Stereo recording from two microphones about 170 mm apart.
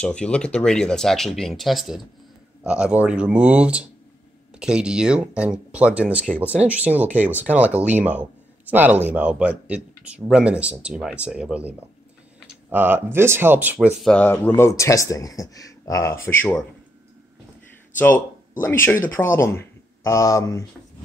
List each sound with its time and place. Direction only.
0.0 s speech: 5° left (ahead or behind); by 13.8 s 10° right (ahead or behind)
14.0 s speech: 10° left (ahead or behind)
17.9 s speech: 10° left (ahead or behind)